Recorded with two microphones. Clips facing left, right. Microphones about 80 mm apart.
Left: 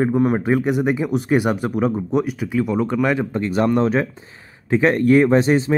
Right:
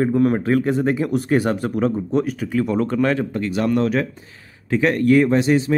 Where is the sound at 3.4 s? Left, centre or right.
Left.